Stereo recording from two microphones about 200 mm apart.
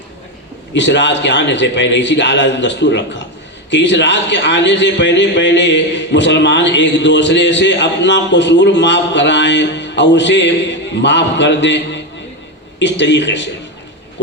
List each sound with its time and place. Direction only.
0.7 s a man's voice: 60° left (ahead or behind)
12.8 s a man's voice: 60° left (ahead or behind)